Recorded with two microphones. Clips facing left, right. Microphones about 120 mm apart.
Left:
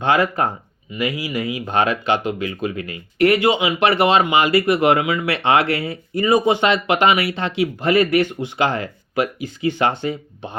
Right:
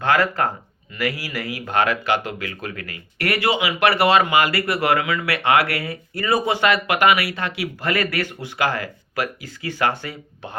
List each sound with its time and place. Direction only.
0.0 s speech: 20° left (ahead or behind)